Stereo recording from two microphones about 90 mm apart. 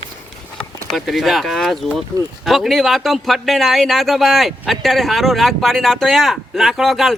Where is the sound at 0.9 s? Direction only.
Centre (ahead or behind).